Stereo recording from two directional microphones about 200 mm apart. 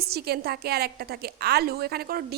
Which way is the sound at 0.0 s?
50° right (ahead or behind).